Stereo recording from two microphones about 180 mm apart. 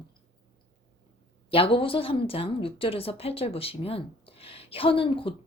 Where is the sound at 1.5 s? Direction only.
30° left (ahead or behind).